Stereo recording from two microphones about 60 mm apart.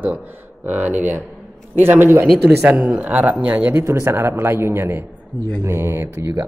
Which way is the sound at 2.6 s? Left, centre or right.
Right.